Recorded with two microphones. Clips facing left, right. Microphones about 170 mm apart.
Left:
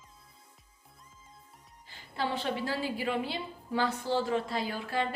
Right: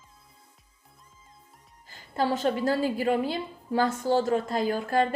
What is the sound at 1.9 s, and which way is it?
Speech, 45° right (ahead or behind).